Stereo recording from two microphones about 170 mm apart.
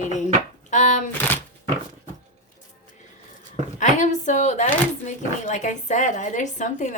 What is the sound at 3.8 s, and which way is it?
A woman's voice, 45° left (ahead or behind).